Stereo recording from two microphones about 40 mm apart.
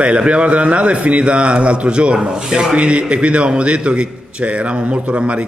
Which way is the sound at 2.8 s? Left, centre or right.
Right.